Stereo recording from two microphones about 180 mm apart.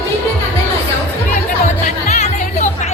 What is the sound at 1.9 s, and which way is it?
Music, 40° left (ahead or behind).